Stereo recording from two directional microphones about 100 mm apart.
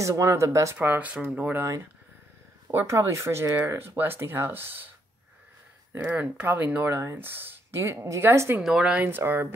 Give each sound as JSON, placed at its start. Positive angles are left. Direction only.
{"t": 0.0, "sound": "speech", "side_deg": -30}
{"t": 0.7, "sound": "speech", "side_deg": -15}
{"t": 2.7, "sound": "speech", "side_deg": -25}
{"t": 6.0, "sound": "speech", "side_deg": -15}
{"t": 8.6, "sound": "speech", "side_deg": -10}
{"t": 9.0, "sound": "speech", "side_deg": -20}